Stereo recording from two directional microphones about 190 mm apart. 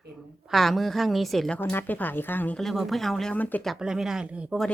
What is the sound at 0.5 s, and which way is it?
A woman's voice, centre (ahead or behind).